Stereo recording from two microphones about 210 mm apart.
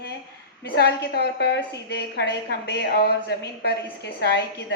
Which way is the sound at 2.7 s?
55° left (ahead or behind).